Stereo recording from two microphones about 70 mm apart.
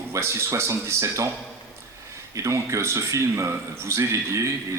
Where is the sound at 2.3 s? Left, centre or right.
Right.